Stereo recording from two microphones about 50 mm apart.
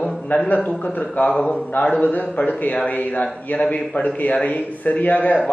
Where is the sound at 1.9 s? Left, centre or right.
Left.